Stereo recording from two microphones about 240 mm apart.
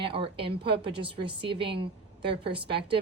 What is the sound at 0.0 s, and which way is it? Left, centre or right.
A woman's voice, right.